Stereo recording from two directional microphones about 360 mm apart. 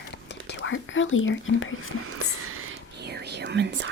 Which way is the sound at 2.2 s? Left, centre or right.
Right.